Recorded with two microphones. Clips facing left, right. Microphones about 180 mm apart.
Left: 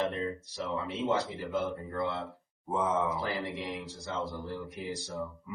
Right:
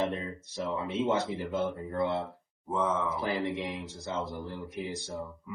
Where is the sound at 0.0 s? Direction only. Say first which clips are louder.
Even; 20° right (ahead or behind).